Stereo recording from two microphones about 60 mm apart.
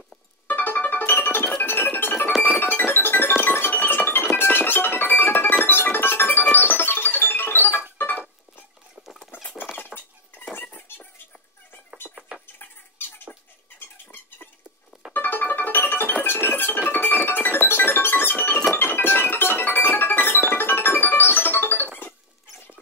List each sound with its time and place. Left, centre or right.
0.5 s music: left
9.3 s cutlery: left
10.5 s a sound: left
15.1 s music: left